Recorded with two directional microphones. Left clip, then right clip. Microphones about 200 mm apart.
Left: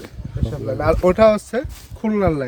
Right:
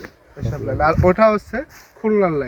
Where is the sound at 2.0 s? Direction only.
65° left (ahead or behind).